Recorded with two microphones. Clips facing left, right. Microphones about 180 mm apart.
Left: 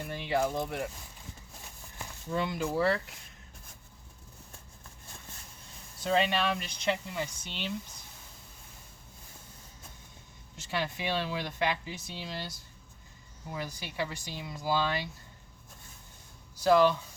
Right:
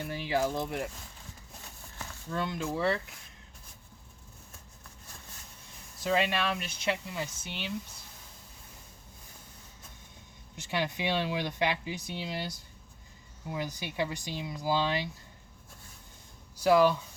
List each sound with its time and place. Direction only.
0.1 s speech: 5° right (ahead or behind)
2.3 s speech: 10° left (ahead or behind)
2.7 s speech: centre (ahead or behind)
6.0 s speech: 5° right (ahead or behind)
10.6 s speech: 15° right (ahead or behind)
16.6 s speech: 10° right (ahead or behind)